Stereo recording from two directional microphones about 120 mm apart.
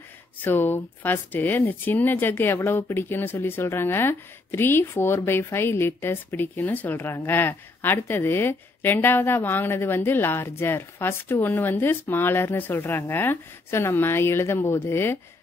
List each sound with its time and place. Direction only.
0.4 s speech: 15° left (ahead or behind)